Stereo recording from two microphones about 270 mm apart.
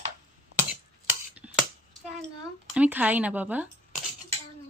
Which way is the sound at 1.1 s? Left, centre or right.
Centre.